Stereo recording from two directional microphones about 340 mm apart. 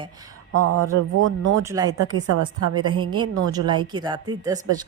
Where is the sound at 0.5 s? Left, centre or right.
Right.